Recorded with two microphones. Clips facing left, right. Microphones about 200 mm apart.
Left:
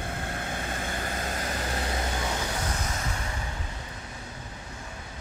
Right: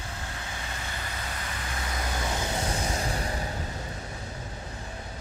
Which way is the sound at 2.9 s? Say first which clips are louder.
Right 4 dB; 35° right (ahead or behind).